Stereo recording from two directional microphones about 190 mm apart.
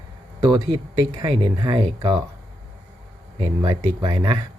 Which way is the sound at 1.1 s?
20° right (ahead or behind).